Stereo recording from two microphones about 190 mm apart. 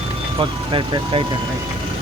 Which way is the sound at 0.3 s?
25° right (ahead or behind).